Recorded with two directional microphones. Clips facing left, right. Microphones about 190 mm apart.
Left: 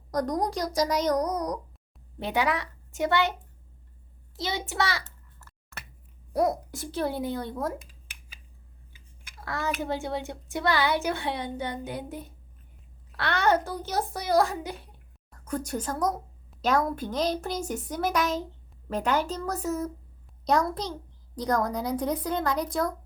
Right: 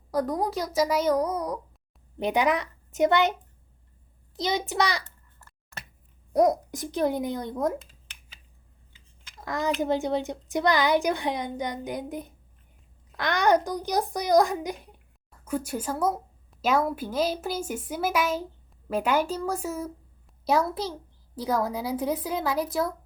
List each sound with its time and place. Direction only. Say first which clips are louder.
0.1 s speech: right 1 dB; 5° right (ahead or behind)
2.1 s a woman's voice: right 3 dB; 15° right (ahead or behind)
4.4 s a child's voice: right 3 dB; 20° right (ahead or behind)
9.4 s speech: right 4 dB; 15° right (ahead or behind)